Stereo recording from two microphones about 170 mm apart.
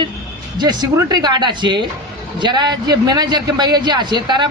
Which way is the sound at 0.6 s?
25° right (ahead or behind).